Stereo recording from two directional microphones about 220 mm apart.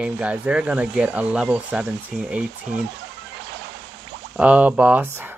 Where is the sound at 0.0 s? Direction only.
5° right (ahead or behind).